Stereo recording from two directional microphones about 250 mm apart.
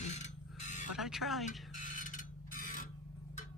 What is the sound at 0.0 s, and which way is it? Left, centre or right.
Mechanisms, left.